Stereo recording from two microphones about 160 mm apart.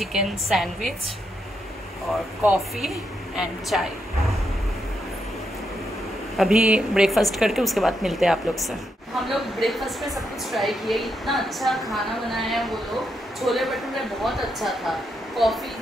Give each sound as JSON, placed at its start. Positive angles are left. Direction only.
{"t": 0.0, "sound": "a woman's voice", "side_deg": -5}
{"t": 2.4, "sound": "a woman's voice", "side_deg": -5}
{"t": 6.3, "sound": "a woman's voice", "side_deg": -5}